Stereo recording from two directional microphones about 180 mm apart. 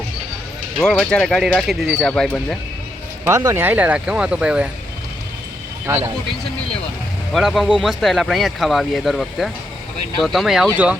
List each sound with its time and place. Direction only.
0.8 s speech: 5° left (ahead or behind)
3.2 s speech: 15° right (ahead or behind)
5.8 s speech: 15° right (ahead or behind)
7.3 s speech: centre (ahead or behind)